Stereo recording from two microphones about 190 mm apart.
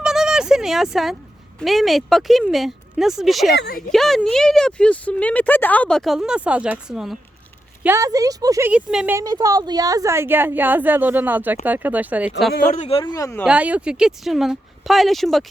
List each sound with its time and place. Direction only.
0.0 s a sound: 5° right (ahead or behind)
1.5 s speech: centre (ahead or behind)
3.6 s speech: 55° left (ahead or behind)
3.9 s speech: centre (ahead or behind)
7.9 s a woman's voice: 15° right (ahead or behind)
8.7 s speech: 5° right (ahead or behind)
9.1 s a woman's voice: 20° right (ahead or behind); by 12.7 s centre (ahead or behind)
12.7 s speech: 35° left (ahead or behind); by 13.4 s 20° left (ahead or behind)
13.4 s speech: 5° right (ahead or behind)